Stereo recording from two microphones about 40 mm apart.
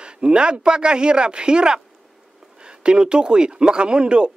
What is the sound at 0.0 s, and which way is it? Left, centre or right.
A woman's voice, right.